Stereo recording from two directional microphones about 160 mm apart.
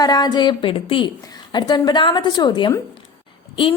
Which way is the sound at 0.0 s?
25° left (ahead or behind).